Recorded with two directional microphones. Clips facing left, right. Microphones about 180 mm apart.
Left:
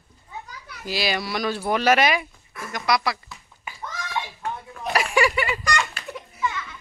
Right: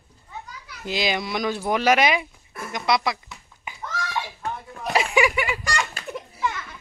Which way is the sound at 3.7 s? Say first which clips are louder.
Right 2 dB; 20° right (ahead or behind).